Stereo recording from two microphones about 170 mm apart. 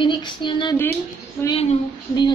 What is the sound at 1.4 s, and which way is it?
Speech, 15° left (ahead or behind).